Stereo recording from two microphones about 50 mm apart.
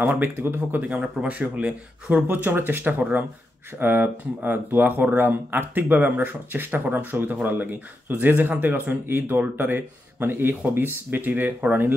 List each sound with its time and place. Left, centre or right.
0.0 s speech: right
0.6 s speech: right
2.8 s speech: right
3.8 s speech: right